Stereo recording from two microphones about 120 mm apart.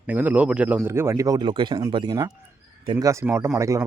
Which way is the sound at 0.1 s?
15° right (ahead or behind).